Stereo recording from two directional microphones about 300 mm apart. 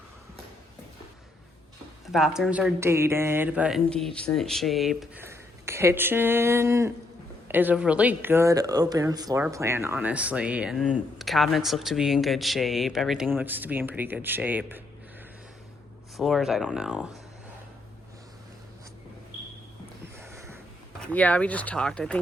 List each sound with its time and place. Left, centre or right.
2.1 s speech: centre
16.1 s speech: centre
20.1 s snort: centre
21.0 s speech: centre